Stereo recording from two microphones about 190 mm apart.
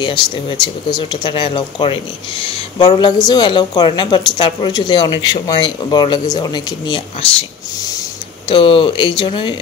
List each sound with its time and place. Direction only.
0.0 s a woman's voice: 25° left (ahead or behind)
8.5 s a woman's voice: 25° left (ahead or behind)